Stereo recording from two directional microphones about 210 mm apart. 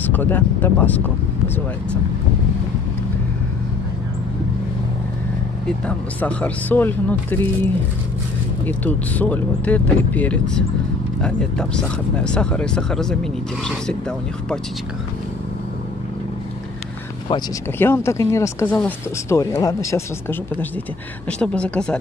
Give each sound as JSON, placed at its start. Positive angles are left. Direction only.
{"t": 0.1, "sound": "speech", "side_deg": 10}
{"t": 5.7, "sound": "speech", "side_deg": 5}
{"t": 17.7, "sound": "speech", "side_deg": 10}